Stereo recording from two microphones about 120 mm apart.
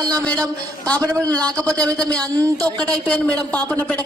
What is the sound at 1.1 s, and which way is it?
Speech, 30° right (ahead or behind).